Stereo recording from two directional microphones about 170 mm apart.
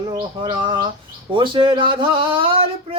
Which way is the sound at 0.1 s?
25° right (ahead or behind).